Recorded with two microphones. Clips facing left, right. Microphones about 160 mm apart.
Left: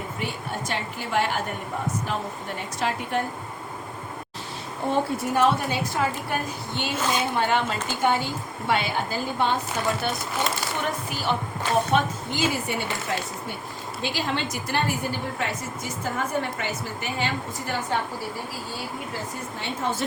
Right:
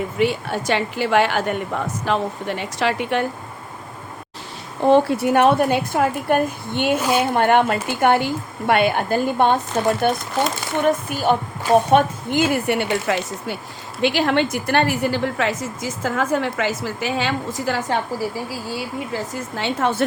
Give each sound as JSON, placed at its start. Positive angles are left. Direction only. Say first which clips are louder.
{"t": 0.2, "sound": "a woman's voice", "louder": "right 12 dB", "side_deg": -90}
{"t": 4.9, "sound": "a woman's voice", "louder": "right 10 dB", "side_deg": -90}
{"t": 11.9, "sound": "speech", "louder": "right 7 dB", "side_deg": -60}
{"t": 14.0, "sound": "a woman's voice", "louder": "right 10 dB", "side_deg": -70}
{"t": 19.1, "sound": "a woman's voice", "louder": "right 6 dB", "side_deg": -90}